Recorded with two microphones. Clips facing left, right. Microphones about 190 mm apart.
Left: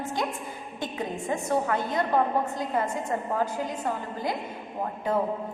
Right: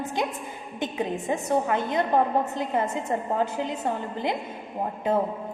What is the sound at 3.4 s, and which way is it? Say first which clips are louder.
Speech: right 2 dB; 20° right (ahead or behind).